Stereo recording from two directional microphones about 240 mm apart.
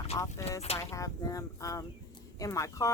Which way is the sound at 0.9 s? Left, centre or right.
Centre.